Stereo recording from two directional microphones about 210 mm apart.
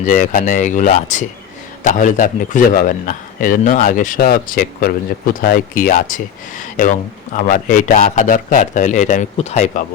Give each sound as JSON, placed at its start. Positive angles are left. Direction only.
{"t": 0.0, "sound": "a man's voice", "side_deg": 40}